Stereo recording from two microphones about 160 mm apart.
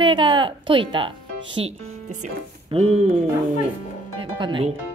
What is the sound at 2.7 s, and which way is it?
Speech, 40° right (ahead or behind).